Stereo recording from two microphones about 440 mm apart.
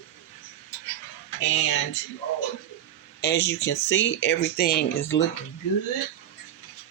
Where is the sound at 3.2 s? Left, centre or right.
Left.